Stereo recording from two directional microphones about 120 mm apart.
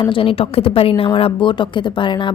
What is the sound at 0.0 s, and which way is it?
A woman's voice, 45° left (ahead or behind).